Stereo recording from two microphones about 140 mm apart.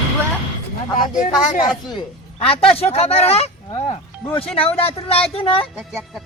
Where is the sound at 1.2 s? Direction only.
70° left (ahead or behind).